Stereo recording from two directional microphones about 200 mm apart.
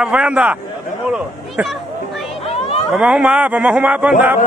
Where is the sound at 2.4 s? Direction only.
30° left (ahead or behind).